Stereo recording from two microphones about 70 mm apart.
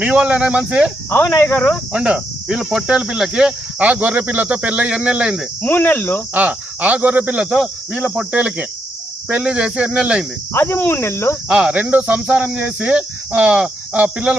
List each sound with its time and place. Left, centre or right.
0.0 s speech: centre
1.9 s speech: centre
3.8 s speech: right
5.6 s cricket: left
6.3 s speech: right
10.5 s cricket: left
11.4 s speech: centre